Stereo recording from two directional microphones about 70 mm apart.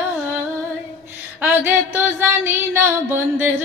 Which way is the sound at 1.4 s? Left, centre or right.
Right.